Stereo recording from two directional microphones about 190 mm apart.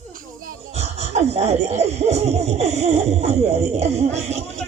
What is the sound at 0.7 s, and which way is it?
Speech, 35° right (ahead or behind).